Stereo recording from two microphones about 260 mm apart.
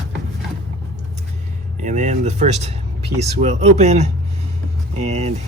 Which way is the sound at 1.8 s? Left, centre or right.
Right.